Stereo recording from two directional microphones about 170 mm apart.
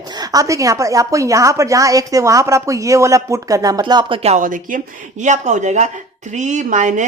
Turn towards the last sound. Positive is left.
turn(degrees=-45)  # may be behind; listen again after turning